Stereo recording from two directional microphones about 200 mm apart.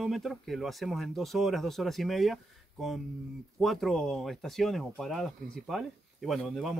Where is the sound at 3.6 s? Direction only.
Centre (ahead or behind).